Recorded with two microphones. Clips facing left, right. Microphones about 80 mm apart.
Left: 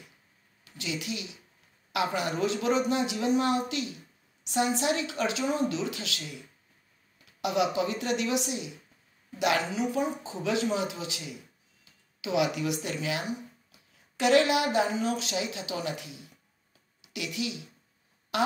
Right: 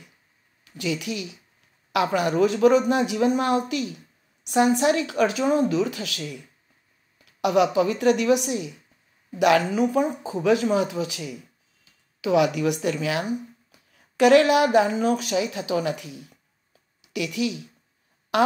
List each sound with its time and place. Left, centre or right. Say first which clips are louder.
0.7 s a man's voice: right 7 dB; right
7.4 s a woman's voice: right 7 dB; right
17.1 s a man's voice: right 8 dB; right